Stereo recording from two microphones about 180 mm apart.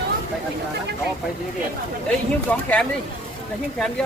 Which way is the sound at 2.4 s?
5° left (ahead or behind).